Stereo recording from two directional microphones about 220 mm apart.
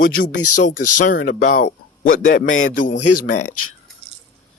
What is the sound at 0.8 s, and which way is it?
Speech, 90° left.